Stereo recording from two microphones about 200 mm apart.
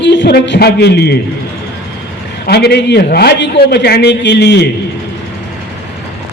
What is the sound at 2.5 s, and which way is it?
A man's voice, 55° left (ahead or behind).